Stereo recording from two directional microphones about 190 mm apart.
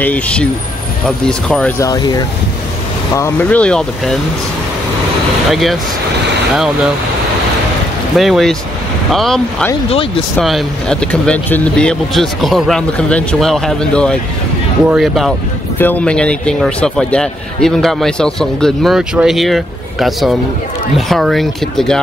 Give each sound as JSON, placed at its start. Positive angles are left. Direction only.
{"t": 0.0, "sound": "a man's voice", "side_deg": 5}
{"t": 1.8, "sound": "speech", "side_deg": 20}
{"t": 5.5, "sound": "a man's voice", "side_deg": 0}
{"t": 8.2, "sound": "a man's voice", "side_deg": 0}